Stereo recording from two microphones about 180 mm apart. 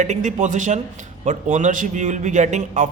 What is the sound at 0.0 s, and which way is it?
A man's voice, 40° right (ahead or behind).